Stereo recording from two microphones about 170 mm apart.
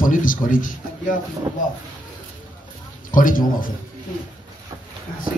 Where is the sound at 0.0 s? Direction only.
55° left (ahead or behind).